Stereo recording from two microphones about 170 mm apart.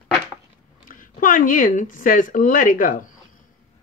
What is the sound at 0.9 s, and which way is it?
A woman's voice, 50° left (ahead or behind).